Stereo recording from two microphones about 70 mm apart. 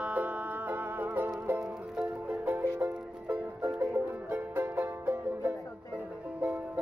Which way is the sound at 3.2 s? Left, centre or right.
Centre.